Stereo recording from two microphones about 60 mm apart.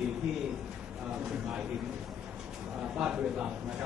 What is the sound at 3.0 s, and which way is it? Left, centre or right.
Speech, centre.